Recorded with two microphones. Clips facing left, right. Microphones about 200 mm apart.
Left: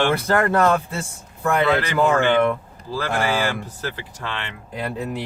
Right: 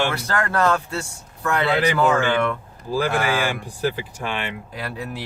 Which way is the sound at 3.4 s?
15° right (ahead or behind).